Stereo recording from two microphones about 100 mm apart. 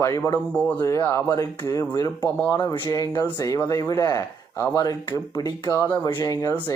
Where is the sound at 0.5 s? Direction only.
15° left (ahead or behind).